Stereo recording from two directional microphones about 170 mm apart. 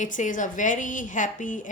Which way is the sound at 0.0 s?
50° left (ahead or behind).